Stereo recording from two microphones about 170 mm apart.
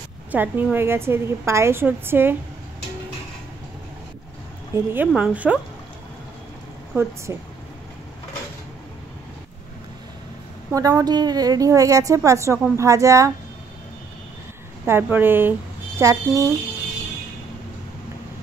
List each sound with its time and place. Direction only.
0.3 s a woman's voice: 10° right (ahead or behind)
4.7 s a woman's voice: 10° right (ahead or behind)
6.9 s a woman's voice: 15° right (ahead or behind)
10.7 s a woman's voice: 20° right (ahead or behind)
14.9 s a woman's voice: 10° right (ahead or behind)